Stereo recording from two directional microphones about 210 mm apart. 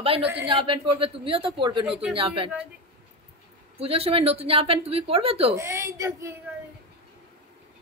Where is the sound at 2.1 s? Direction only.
25° right (ahead or behind).